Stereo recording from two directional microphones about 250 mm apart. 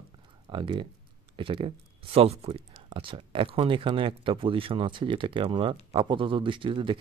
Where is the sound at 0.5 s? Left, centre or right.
Centre.